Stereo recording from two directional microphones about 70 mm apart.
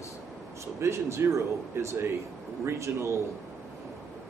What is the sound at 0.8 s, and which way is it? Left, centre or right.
Speech, right.